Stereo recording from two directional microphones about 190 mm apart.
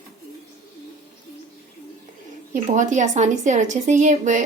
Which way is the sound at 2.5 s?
40° right (ahead or behind).